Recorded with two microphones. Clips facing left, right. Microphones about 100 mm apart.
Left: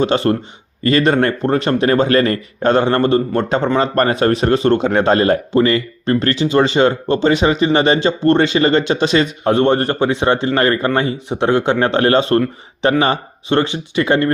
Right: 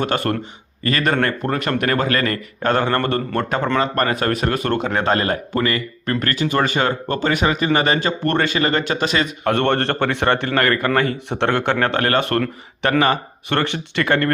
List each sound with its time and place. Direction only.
0.1 s a man's voice: 25° left (ahead or behind)
3.8 s a man's voice: 35° left (ahead or behind)
9.6 s a man's voice: 15° left (ahead or behind)